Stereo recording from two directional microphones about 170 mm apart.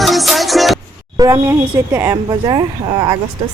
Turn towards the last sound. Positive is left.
turn(degrees=-25)  # may be behind; listen again after turning